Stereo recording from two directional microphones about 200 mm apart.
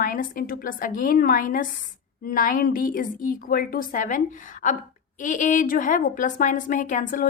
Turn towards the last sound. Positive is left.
turn(degrees=40)  # may be behind; listen again after turning